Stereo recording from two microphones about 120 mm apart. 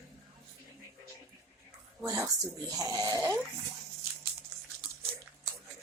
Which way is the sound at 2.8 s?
30° right (ahead or behind).